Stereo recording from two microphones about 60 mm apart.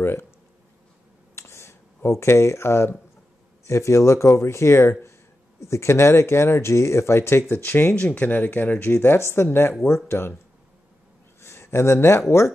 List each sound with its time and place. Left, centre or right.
0.0 s a sound: left
1.3 s a sound: left
2.0 s speech: left
7.9 s speech: left
8.9 s speech: left
11.4 s speech: left